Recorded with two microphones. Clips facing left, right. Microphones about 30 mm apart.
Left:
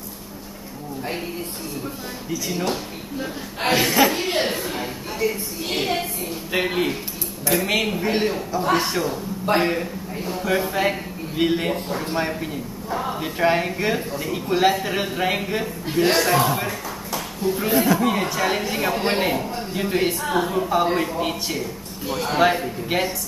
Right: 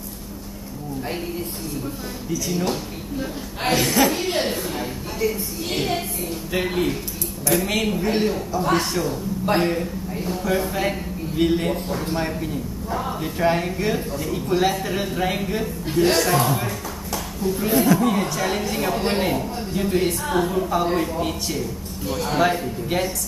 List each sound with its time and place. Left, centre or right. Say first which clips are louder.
2.3 s speech: right 1 dB; centre